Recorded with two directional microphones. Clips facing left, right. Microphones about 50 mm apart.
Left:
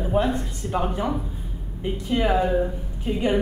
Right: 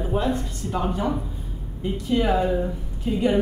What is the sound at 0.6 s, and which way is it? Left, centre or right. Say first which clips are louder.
Speech: left 2 dB; centre.